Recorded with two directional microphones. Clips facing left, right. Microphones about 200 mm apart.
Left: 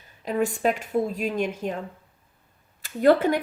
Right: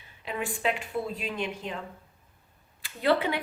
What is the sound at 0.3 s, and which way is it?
Speech, 40° left (ahead or behind).